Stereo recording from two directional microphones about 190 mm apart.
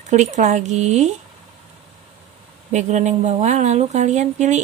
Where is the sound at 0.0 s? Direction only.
40° right (ahead or behind).